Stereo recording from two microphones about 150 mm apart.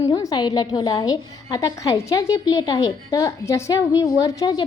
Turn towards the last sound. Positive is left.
turn(degrees=25)  # may be behind; listen again after turning